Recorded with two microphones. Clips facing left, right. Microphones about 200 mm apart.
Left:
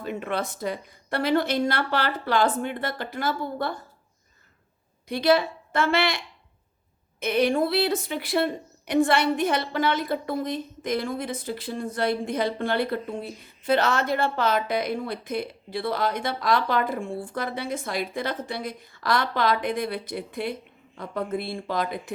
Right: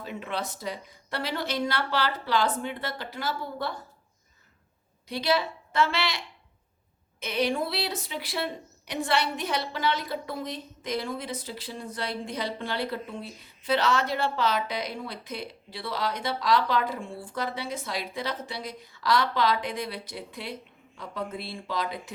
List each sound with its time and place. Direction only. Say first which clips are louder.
0.0 s a woman's voice: left 5 dB; 55° left (ahead or behind)
5.0 s a woman's voice: left 6 dB; 50° left (ahead or behind)